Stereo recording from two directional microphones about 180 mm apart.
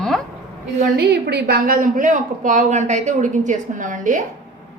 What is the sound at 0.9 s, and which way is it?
A woman's voice, 65° right (ahead or behind).